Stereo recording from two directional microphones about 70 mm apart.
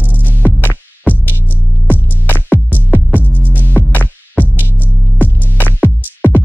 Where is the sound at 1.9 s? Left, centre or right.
Left.